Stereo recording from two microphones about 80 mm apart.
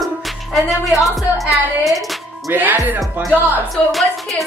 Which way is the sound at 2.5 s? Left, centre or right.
Right.